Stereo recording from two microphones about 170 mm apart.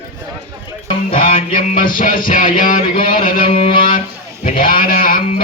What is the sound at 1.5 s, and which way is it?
Music, 55° left (ahead or behind).